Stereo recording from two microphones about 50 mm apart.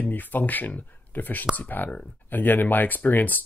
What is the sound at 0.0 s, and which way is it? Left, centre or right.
Speech, left.